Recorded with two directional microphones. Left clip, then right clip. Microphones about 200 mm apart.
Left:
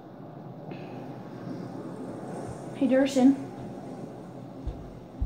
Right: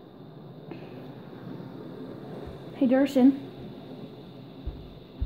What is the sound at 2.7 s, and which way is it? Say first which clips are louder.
Speech: even; 40° right (ahead or behind).